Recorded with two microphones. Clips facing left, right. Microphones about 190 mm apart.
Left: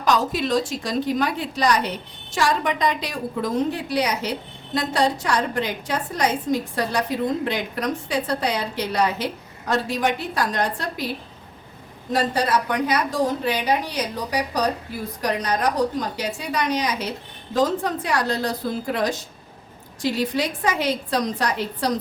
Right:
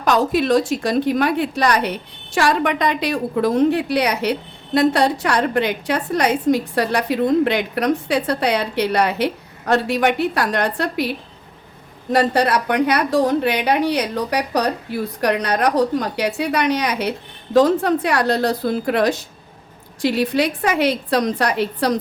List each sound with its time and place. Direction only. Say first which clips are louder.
0.0 s a woman's voice: right 4 dB; 60° right (ahead or behind)
12.1 s a woman's voice: right 5 dB; 65° right (ahead or behind)